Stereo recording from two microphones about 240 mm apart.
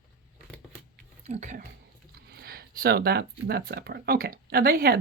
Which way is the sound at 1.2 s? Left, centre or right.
Right.